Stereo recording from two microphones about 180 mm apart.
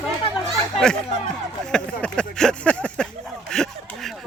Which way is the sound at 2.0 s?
5° left (ahead or behind).